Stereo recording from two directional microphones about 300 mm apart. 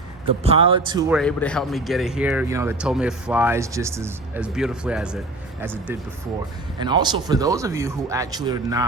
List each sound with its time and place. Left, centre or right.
0.4 s speech: centre
1.1 s speech: centre